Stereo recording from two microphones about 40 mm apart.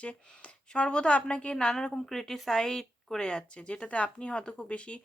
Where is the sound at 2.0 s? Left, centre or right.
Centre; by 5.0 s left.